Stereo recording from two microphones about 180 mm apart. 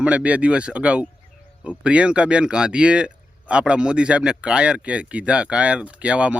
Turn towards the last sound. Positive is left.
turn(degrees=-5)  # may be behind; listen again after turning